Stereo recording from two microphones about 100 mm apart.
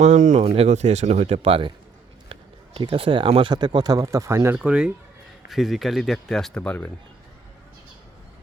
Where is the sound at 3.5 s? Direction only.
45° right (ahead or behind).